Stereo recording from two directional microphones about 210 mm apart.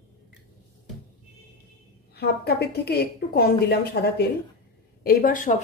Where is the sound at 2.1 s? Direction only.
50° left (ahead or behind).